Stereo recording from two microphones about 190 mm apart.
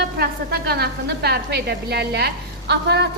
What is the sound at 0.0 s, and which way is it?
A woman's voice, 60° right (ahead or behind).